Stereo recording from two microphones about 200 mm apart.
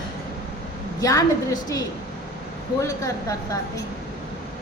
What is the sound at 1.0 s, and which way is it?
A woman's voice, 20° left (ahead or behind).